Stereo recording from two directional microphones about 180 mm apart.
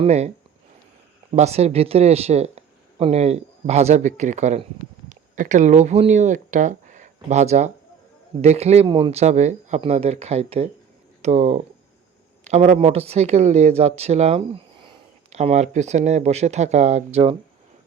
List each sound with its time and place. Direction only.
0.0 s speech: 35° right (ahead or behind)
1.3 s a man's voice: 35° right (ahead or behind)